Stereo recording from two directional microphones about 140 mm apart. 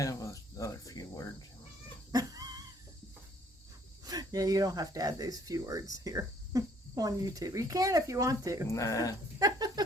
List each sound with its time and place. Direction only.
0.0 s cricket: 25° left (ahead or behind)
2.1 s dog: 25° right (ahead or behind)
4.0 s speech: 25° right (ahead or behind)
8.7 s speech: 20° left (ahead or behind)
9.4 s a sound: 25° right (ahead or behind)